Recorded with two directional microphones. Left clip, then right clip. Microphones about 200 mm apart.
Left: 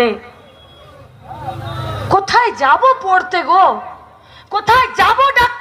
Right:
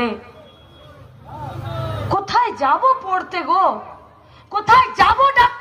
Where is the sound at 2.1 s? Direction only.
40° left (ahead or behind).